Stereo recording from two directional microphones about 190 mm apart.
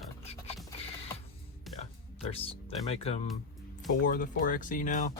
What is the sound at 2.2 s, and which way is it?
Speech, 30° left (ahead or behind).